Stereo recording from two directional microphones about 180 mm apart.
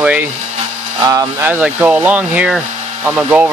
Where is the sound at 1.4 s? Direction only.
10° right (ahead or behind).